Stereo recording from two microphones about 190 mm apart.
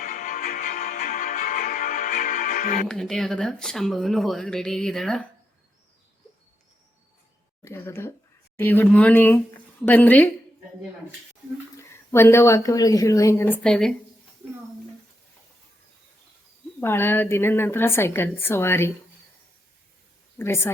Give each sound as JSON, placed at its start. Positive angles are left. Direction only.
{"t": 0.0, "sound": "music", "side_deg": 45}
{"t": 2.8, "sound": "speech", "side_deg": 0}
{"t": 7.6, "sound": "a woman's voice", "side_deg": 15}
{"t": 11.8, "sound": "a woman's voice", "side_deg": 15}
{"t": 16.8, "sound": "a woman's voice", "side_deg": 10}
{"t": 20.4, "sound": "a woman's voice", "side_deg": 15}